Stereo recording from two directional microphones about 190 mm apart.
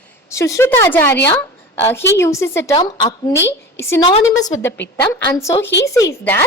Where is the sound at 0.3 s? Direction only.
15° left (ahead or behind).